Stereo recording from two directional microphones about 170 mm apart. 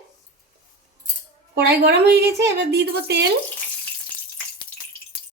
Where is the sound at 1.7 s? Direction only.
75° right (ahead or behind).